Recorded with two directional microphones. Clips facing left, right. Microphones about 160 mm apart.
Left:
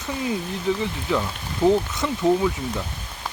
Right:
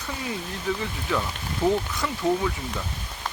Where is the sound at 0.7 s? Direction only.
20° left (ahead or behind).